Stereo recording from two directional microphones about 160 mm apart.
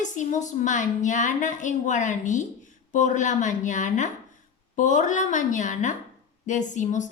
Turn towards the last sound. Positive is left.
turn(degrees=50)  # may be behind; listen again after turning